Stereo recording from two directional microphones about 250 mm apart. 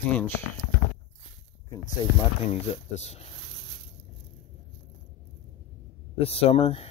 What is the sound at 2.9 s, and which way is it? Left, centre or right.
Speech, left.